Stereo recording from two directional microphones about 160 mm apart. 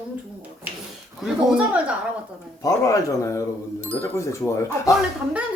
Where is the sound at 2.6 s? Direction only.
20° left (ahead or behind).